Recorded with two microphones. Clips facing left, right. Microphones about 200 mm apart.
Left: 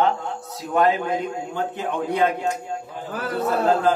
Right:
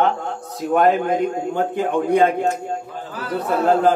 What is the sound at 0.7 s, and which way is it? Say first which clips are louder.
A man's voice: right 4 dB; 50° right (ahead or behind).